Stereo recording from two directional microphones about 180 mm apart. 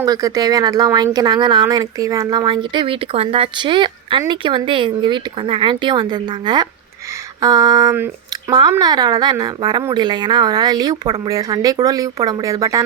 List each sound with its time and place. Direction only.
0.0 s speech: 20° right (ahead or behind)